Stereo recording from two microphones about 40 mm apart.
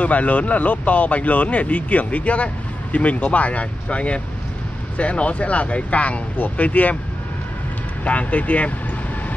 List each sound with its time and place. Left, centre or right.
0.0 s speech: left
8.0 s speech: left